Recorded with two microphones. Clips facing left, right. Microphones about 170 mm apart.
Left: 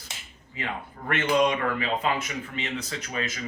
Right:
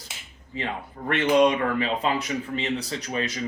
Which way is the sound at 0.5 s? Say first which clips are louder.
Right 3 dB; 35° right (ahead or behind).